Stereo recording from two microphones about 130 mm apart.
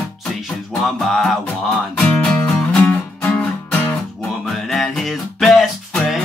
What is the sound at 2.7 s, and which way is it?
Music, 5° left (ahead or behind).